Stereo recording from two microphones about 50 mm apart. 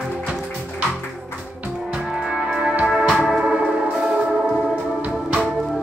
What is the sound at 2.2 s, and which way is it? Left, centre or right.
Music, centre.